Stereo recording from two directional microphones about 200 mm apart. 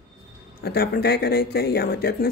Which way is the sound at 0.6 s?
50° left (ahead or behind).